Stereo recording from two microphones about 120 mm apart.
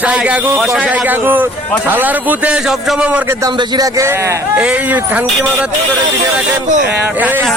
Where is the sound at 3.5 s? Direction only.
35° right (ahead or behind).